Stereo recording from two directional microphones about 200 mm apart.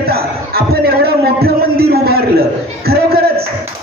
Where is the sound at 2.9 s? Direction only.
50° right (ahead or behind).